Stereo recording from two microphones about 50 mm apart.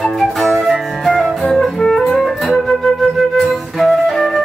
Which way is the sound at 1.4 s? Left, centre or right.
Centre.